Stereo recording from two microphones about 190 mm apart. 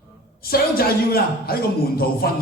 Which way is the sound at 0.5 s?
50° left (ahead or behind).